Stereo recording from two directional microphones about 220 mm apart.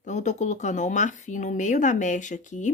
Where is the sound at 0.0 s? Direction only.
35° left (ahead or behind).